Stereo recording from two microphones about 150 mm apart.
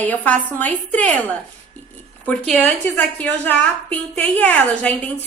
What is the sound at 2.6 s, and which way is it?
A woman's voice, 10° left (ahead or behind).